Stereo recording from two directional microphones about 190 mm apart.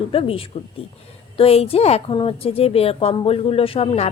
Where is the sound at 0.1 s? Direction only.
30° left (ahead or behind).